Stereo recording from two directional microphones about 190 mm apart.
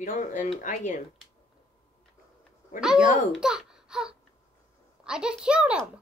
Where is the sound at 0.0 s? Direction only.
45° left (ahead or behind).